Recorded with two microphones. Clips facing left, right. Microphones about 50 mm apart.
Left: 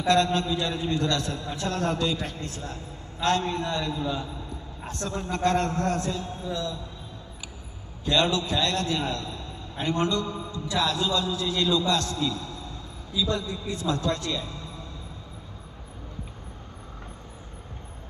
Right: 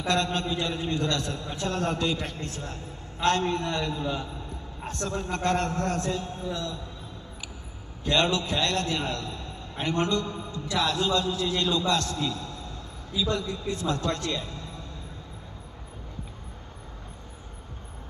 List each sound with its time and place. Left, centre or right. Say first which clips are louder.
0.1 s a man's voice: left 4 dB; right
8.0 s a man's voice: left 1 dB; right